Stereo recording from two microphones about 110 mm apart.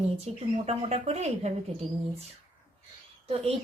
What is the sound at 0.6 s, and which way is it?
Speech, 70° right (ahead or behind).